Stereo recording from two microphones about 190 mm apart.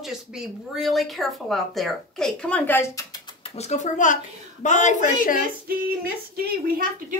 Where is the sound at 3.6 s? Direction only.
35° left (ahead or behind).